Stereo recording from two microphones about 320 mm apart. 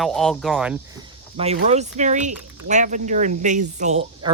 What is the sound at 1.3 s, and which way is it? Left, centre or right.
Speech, centre.